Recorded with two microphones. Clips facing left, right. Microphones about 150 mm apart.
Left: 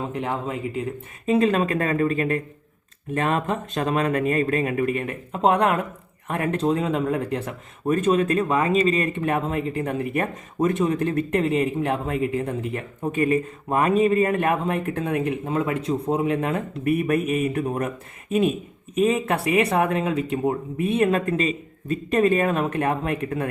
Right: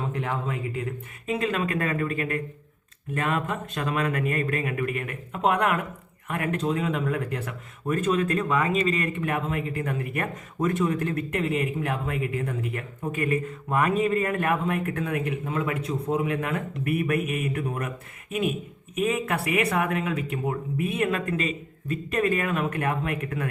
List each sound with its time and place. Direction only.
0.0 s speech: 25° left (ahead or behind)